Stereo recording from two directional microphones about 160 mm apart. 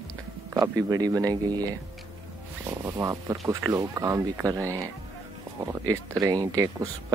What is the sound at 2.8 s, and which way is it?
Speech, 20° right (ahead or behind).